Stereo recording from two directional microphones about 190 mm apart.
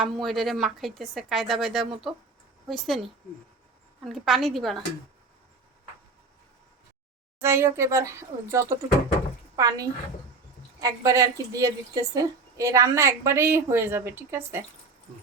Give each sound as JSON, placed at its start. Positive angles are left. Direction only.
{"t": 0.0, "sound": "a woman's voice", "side_deg": 0}
{"t": 7.4, "sound": "a woman's voice", "side_deg": -15}